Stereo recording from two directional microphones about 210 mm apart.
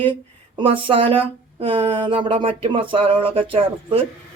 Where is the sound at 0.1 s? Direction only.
25° right (ahead or behind).